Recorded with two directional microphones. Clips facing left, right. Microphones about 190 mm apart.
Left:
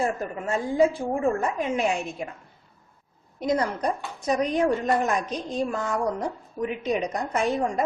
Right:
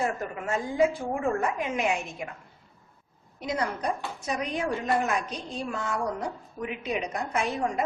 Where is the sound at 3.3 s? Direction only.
40° left (ahead or behind).